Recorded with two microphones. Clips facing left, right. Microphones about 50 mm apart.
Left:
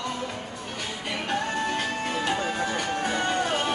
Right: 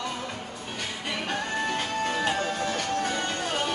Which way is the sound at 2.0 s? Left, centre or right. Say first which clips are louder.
Even; centre.